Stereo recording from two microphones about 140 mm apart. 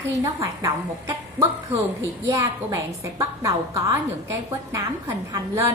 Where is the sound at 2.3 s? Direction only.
20° right (ahead or behind).